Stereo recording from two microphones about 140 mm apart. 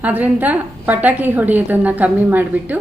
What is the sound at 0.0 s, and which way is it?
A woman's voice, 10° right (ahead or behind).